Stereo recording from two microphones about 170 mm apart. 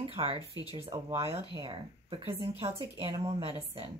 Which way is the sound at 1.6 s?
30° right (ahead or behind).